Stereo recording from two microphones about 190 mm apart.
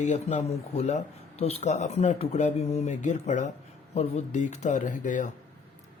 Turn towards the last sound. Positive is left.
turn(degrees=40)  # may be behind; listen again after turning